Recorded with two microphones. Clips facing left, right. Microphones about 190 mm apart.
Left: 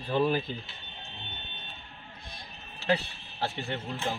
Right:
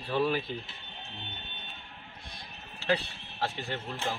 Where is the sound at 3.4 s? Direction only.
20° left (ahead or behind).